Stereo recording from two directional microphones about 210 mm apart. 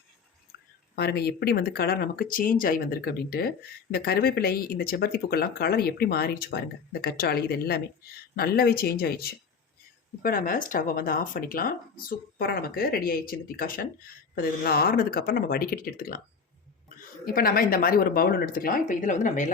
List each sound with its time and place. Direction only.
0.9 s speech: 50° left (ahead or behind)
17.2 s speech: 45° left (ahead or behind)